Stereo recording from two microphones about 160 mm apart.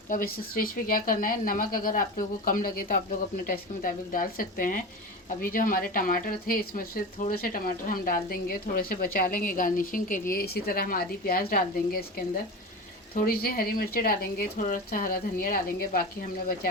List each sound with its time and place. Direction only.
0.1 s speech: 60° left (ahead or behind)
13.1 s speech: 65° left (ahead or behind)
14.6 s speech: 60° left (ahead or behind)